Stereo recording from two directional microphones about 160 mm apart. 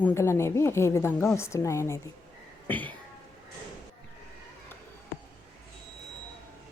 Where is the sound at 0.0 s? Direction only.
15° left (ahead or behind).